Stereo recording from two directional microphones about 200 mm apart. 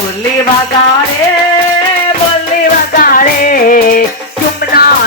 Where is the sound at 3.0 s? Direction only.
45° left (ahead or behind).